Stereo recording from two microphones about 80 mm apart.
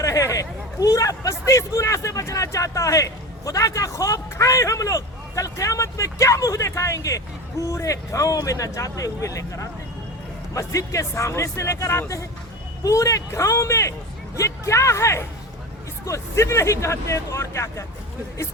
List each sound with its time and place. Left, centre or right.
0.0 s a man's voice: left